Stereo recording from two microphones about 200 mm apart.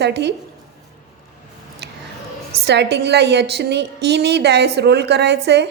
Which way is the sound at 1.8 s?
55° right (ahead or behind).